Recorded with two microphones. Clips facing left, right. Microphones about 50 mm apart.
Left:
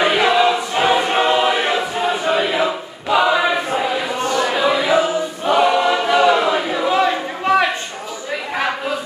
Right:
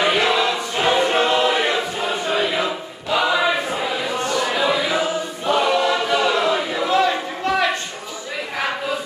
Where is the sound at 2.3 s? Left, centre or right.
Centre.